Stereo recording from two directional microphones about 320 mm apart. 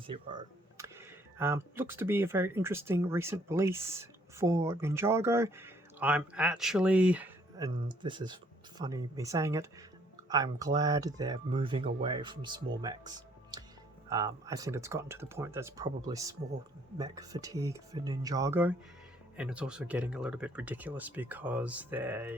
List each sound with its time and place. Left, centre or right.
0.1 s speech: centre
7.9 s speech: centre